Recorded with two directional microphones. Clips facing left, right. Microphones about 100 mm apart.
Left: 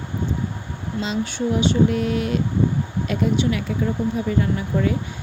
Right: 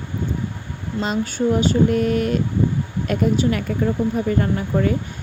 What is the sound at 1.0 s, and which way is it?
A woman's voice, 50° right (ahead or behind).